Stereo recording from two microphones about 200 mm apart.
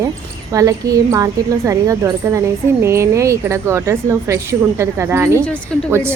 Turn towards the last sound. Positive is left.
turn(degrees=-10)  # may be behind; listen again after turning